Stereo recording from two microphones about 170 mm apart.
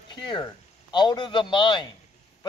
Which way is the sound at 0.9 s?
25° left (ahead or behind).